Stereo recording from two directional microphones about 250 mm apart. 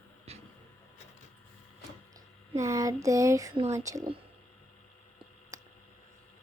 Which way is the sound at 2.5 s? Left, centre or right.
Centre.